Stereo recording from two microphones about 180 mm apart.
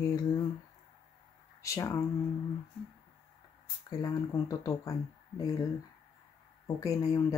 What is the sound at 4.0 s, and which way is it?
Speech, 20° left (ahead or behind).